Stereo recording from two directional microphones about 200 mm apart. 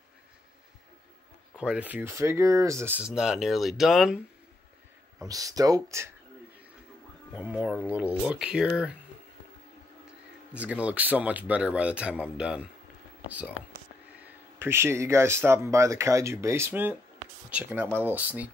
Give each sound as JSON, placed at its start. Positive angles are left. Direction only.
{"t": 1.6, "sound": "speech", "side_deg": -5}
{"t": 5.3, "sound": "speech", "side_deg": -20}
{"t": 7.3, "sound": "speech", "side_deg": -5}
{"t": 10.5, "sound": "speech", "side_deg": -5}
{"t": 14.2, "sound": "speech", "side_deg": -10}